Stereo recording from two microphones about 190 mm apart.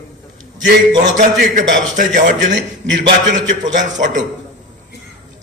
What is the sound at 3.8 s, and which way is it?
Speech, 40° right (ahead or behind).